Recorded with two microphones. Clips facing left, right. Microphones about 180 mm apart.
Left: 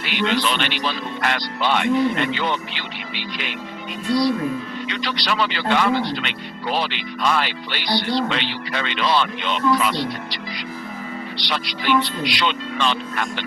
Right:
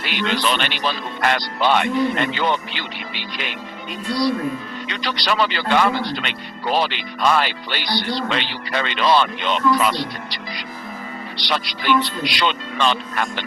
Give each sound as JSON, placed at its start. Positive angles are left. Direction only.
{"t": 0.0, "sound": "speech", "side_deg": -45}
{"t": 4.9, "sound": "speech", "side_deg": -40}